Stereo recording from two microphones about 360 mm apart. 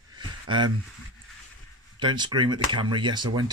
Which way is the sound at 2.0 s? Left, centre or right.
Centre.